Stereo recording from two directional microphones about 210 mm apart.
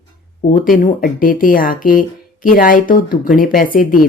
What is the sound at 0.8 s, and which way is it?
Speech, 40° left (ahead or behind).